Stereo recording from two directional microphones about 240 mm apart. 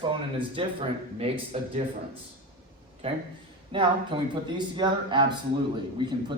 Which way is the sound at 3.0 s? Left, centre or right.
Right.